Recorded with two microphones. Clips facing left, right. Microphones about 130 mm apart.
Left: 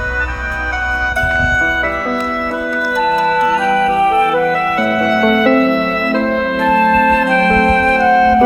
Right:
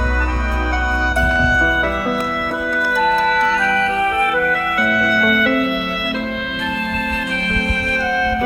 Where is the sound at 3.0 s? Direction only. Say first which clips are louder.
Left 3 dB; 5° left (ahead or behind); by 8.4 s 40° left (ahead or behind).